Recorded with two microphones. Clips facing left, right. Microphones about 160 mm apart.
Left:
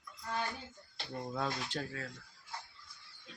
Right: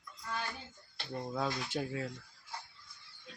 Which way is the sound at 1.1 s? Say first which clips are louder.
Right 2 dB; centre (ahead or behind).